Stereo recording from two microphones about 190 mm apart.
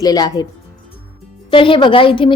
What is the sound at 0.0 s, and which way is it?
Speech, 20° left (ahead or behind).